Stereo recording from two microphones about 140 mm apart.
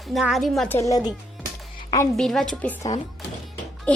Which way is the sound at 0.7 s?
20° left (ahead or behind).